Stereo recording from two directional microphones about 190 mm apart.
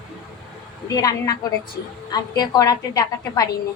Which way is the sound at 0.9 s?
20° left (ahead or behind).